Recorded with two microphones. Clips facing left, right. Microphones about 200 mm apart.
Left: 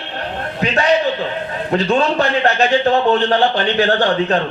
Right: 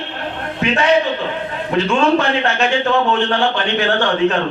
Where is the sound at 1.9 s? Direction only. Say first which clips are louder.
Right 1 dB; 35° left (ahead or behind).